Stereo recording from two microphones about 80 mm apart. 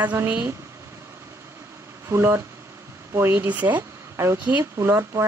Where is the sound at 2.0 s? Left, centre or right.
Right.